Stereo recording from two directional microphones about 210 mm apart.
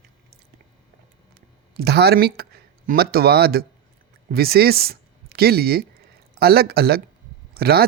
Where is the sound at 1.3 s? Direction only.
50° right (ahead or behind).